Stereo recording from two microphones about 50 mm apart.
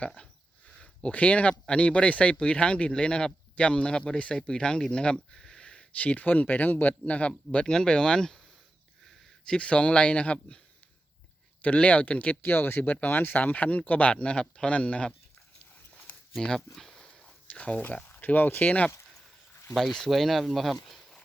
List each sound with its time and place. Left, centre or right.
1.1 s speech: left
6.0 s speech: left; by 8.4 s centre
9.5 s speech: left
11.6 s speech: left
12.4 s speech: left
12.8 s speech: left
16.4 s speech: centre
16.7 s a sound: centre
17.5 s speech: left
20.1 s speech: centre